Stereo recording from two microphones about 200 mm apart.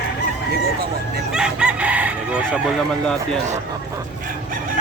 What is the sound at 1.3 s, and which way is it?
Chicken, 5° right (ahead or behind).